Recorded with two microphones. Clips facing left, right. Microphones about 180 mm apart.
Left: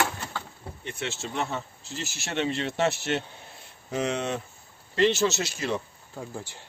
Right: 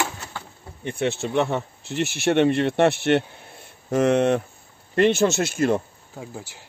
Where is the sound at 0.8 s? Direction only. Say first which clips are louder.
Right 10 dB; 55° right (ahead or behind).